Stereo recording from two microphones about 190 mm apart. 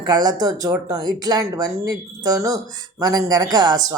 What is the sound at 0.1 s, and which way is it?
Speech, 20° right (ahead or behind).